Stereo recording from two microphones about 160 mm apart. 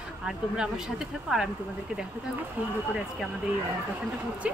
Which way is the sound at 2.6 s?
10° right (ahead or behind).